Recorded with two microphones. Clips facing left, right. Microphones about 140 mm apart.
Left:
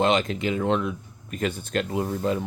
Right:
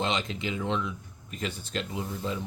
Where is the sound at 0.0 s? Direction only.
55° left (ahead or behind).